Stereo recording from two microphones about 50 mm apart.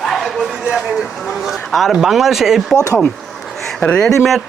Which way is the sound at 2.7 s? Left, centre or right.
Right.